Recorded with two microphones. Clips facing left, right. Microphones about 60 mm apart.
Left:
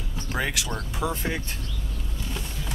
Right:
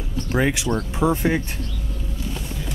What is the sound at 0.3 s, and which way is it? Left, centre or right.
Speech, centre.